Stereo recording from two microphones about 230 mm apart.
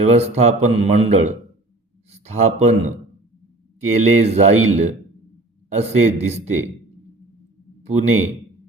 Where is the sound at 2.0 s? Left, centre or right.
Right.